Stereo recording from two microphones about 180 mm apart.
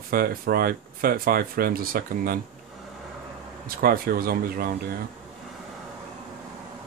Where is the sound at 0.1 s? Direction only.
55° right (ahead or behind).